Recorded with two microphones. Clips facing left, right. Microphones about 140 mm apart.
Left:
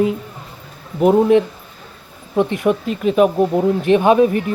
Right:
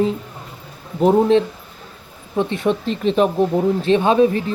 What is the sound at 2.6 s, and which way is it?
Speech, 10° left (ahead or behind).